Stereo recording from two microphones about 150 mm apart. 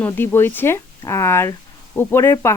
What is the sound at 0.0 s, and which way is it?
Speech, 15° left (ahead or behind).